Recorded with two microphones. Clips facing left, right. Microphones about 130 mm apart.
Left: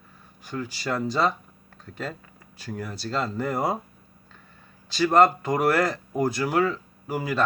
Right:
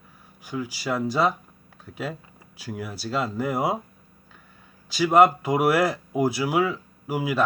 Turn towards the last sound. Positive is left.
turn(degrees=-5)  # may be behind; listen again after turning